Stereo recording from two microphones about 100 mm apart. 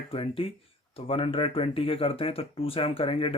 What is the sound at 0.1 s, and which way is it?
Speech, 70° left (ahead or behind).